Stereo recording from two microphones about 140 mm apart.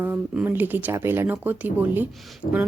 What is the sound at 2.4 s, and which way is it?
Speech, 45° left (ahead or behind).